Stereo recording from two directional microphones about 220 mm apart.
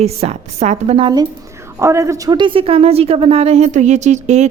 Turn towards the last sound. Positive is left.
turn(degrees=-30)  # may be behind; listen again after turning